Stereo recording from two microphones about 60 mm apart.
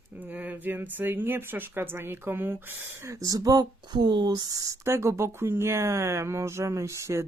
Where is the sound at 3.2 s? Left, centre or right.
Right.